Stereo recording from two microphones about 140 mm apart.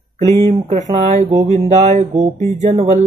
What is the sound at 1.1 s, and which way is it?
Speech, 45° right (ahead or behind).